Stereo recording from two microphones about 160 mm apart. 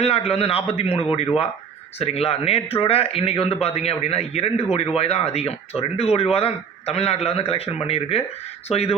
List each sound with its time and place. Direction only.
0.0 s a man's voice: 40° left (ahead or behind)